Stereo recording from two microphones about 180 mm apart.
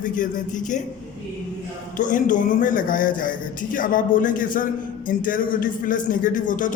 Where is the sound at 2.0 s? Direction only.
45° left (ahead or behind).